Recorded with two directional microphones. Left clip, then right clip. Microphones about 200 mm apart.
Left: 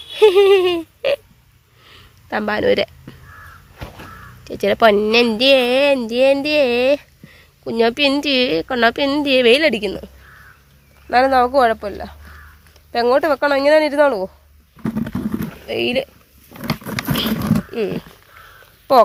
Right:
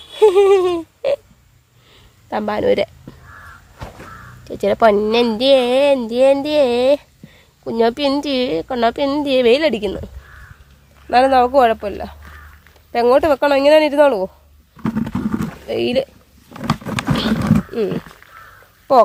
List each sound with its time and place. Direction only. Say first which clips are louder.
0.1 s a sound: even; 5° right (ahead or behind)
4.4 s a woman's voice: even; 5° right (ahead or behind)
11.1 s a woman's voice: right 1 dB; 15° right (ahead or behind)
14.9 s wild animals: right 2 dB; centre (ahead or behind)
15.6 s a woman's voice: right 1 dB; 20° right (ahead or behind)
17.1 s horse: right 1 dB; 25° right (ahead or behind)
17.4 s roaring cats: right 2 dB; 10° right (ahead or behind)
18.9 s a woman's voice: even; 5° right (ahead or behind)